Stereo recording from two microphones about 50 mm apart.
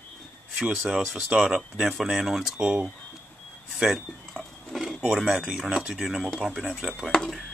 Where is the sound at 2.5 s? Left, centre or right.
Centre.